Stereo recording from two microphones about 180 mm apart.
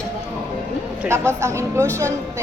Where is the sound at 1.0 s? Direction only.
15° right (ahead or behind).